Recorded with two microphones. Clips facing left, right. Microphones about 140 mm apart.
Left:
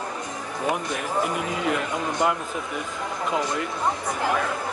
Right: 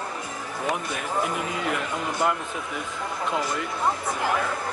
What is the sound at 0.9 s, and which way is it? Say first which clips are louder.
Speech: left 2 dB; centre (ahead or behind).